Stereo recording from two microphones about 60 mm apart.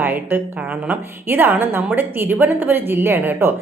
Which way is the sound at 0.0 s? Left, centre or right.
Right.